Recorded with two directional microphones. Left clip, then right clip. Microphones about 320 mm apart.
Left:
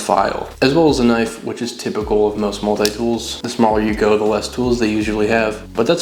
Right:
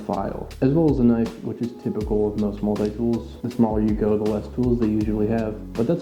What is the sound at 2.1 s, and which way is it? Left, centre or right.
Speech, left.